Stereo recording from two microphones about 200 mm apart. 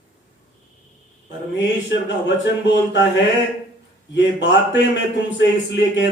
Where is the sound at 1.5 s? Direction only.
65° left (ahead or behind).